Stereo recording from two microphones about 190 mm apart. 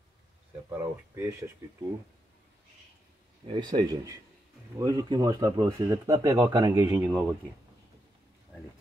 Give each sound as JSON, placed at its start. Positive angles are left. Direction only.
{"t": 0.7, "sound": "speech", "side_deg": -15}
{"t": 3.4, "sound": "speech", "side_deg": -25}
{"t": 7.0, "sound": "speech", "side_deg": -5}